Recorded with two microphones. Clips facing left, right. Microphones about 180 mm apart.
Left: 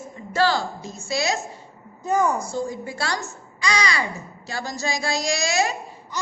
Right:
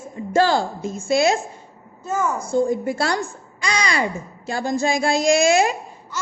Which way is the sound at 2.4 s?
55° right (ahead or behind).